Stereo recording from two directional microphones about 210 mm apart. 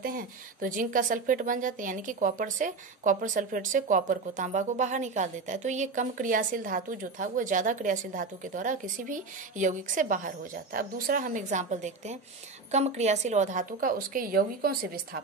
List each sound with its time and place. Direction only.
0.0 s a woman's voice: 40° right (ahead or behind)